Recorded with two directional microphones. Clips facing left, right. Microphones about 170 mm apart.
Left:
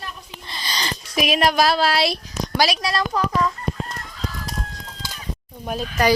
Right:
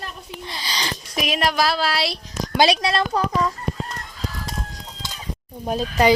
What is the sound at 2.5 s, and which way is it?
Speech, 25° right (ahead or behind).